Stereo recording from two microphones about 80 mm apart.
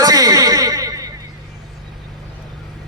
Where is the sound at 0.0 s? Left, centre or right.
Right.